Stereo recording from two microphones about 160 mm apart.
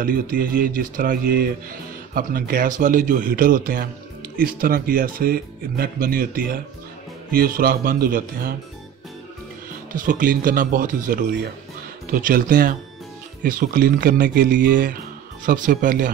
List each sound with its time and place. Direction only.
0.0 s speech: 60° right (ahead or behind)
9.9 s speech: 60° right (ahead or behind)